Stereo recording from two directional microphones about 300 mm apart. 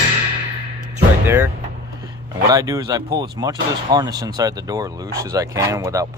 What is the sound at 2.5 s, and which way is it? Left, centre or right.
Speech, centre.